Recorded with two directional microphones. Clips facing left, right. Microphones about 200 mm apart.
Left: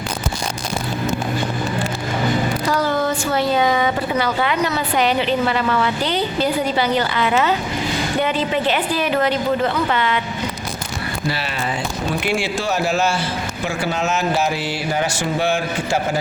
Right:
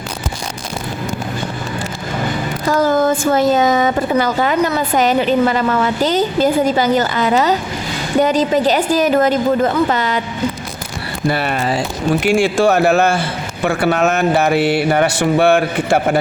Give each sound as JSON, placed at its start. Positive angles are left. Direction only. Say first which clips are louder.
{"t": 2.6, "sound": "a woman's voice", "louder": "right 9 dB", "side_deg": -45}
{"t": 11.3, "sound": "a woman's voice", "louder": "right 8 dB", "side_deg": -55}
{"t": 12.4, "sound": "mantra", "louder": "right 9 dB", "side_deg": -55}